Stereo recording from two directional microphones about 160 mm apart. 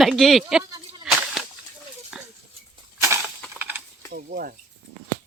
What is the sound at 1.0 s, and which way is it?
Whip, 5° right (ahead or behind).